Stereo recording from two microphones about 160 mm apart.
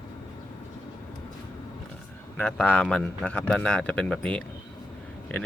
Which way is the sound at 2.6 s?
10° left (ahead or behind).